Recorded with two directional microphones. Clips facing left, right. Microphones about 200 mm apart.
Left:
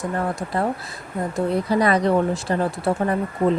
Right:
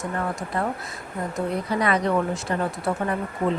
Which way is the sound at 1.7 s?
35° left (ahead or behind).